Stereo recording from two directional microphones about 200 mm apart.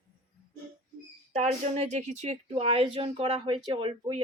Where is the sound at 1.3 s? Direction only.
35° right (ahead or behind).